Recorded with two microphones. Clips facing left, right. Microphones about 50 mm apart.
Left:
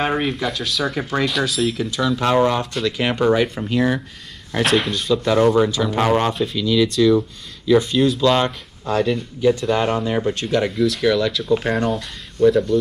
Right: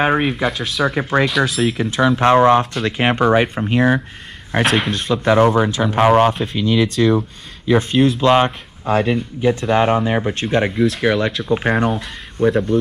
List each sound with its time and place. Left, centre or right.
0.0 s speech: centre
0.5 s speech: centre
0.8 s speech: right
1.9 s speech: right
4.6 s speech: centre
5.1 s speech: right